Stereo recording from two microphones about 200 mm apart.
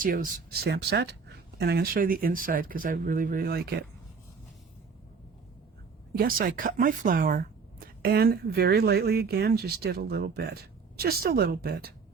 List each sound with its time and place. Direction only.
0.0 s speech: 45° right (ahead or behind)
6.1 s speech: 45° right (ahead or behind)